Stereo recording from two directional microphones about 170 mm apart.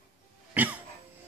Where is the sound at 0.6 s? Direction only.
10° right (ahead or behind).